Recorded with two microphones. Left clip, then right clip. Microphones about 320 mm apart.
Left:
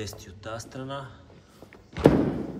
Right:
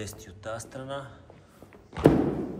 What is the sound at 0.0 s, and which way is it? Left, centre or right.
Speech, centre.